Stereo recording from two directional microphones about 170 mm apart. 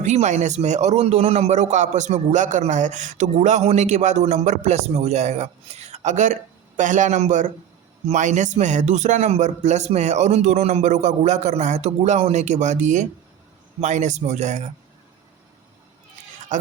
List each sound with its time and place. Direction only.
0.0 s a man's voice: 45° right (ahead or behind)
16.5 s speech: 45° right (ahead or behind)